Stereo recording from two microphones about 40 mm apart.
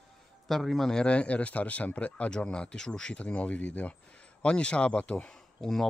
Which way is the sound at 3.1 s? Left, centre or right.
Left.